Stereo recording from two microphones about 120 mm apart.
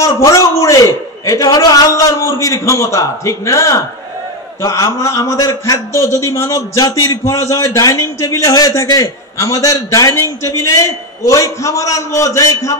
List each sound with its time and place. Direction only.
0.0 s a man's voice: 25° left (ahead or behind)